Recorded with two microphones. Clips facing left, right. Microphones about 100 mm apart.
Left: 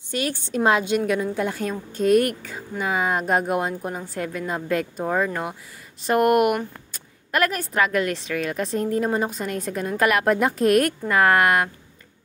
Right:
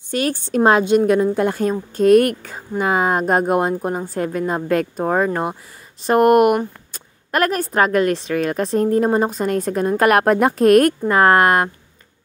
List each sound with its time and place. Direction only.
0.1 s a woman's voice: 45° right (ahead or behind)